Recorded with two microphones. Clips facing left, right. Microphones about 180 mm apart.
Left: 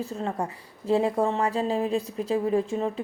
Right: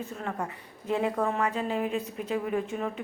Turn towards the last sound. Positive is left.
turn(degrees=30)  # may be behind; listen again after turning